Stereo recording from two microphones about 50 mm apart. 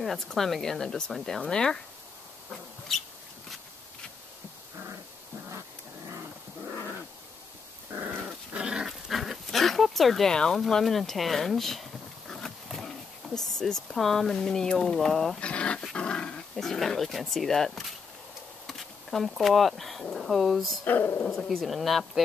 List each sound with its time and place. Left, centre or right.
0.0 s speech: centre
2.9 s speech: centre
8.5 s dog: centre
10.3 s speech: centre
10.7 s a sound: centre
13.9 s speech: centre
15.3 s speech: left
15.8 s dog: centre
16.5 s speech: centre
20.8 s a woman's voice: left
21.4 s speech: centre